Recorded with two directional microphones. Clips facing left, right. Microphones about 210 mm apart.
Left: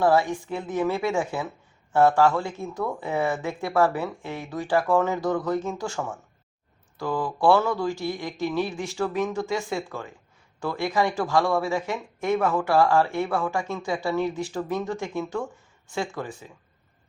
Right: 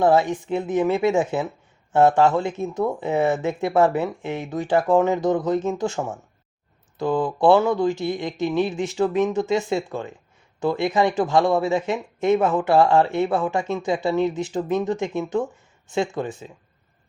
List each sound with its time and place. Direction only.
0.0 s speech: 20° right (ahead or behind)